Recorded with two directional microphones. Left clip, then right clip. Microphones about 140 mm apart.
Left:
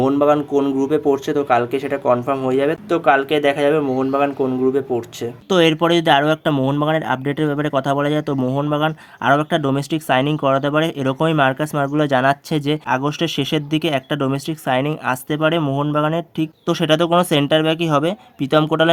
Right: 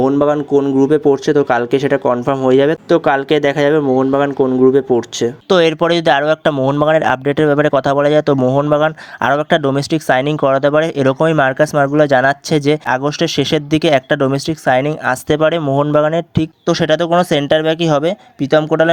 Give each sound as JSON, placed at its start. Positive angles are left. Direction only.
{"t": 0.3, "sound": "speech", "side_deg": -20}
{"t": 6.8, "sound": "speech", "side_deg": -50}
{"t": 8.4, "sound": "speech", "side_deg": -25}
{"t": 8.7, "sound": "speech", "side_deg": -40}
{"t": 15.3, "sound": "speech", "side_deg": -45}
{"t": 15.6, "sound": "speech", "side_deg": -35}